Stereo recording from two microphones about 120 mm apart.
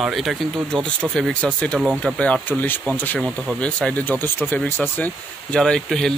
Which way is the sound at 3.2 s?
Centre (ahead or behind).